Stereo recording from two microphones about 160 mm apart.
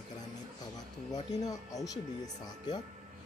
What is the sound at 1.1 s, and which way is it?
Speech, 25° left (ahead or behind).